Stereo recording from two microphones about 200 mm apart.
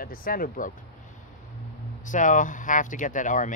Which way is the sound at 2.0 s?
40° left (ahead or behind).